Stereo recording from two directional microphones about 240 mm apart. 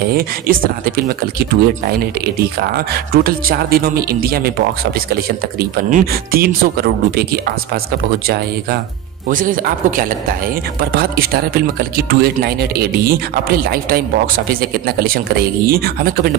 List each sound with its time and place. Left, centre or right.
0.1 s speech: right
9.3 s speech: right